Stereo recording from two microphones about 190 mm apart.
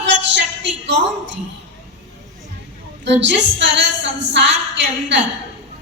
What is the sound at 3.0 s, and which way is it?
A woman's voice, 65° right (ahead or behind).